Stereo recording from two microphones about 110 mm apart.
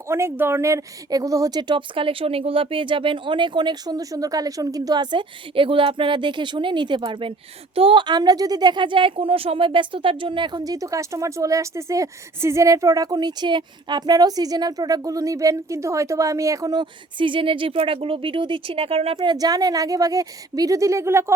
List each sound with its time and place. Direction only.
0.1 s a woman's voice: 20° right (ahead or behind); by 19.1 s 60° right (ahead or behind)
19.1 s speech: 40° right (ahead or behind); by 21.3 s 25° right (ahead or behind)